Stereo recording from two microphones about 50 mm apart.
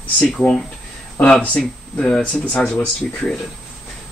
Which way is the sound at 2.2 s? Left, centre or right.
Left.